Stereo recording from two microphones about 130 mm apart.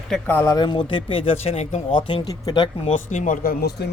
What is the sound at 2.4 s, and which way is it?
Speech, 35° left (ahead or behind).